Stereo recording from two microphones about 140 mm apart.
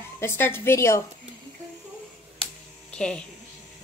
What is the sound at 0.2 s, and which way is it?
Speech, 15° left (ahead or behind).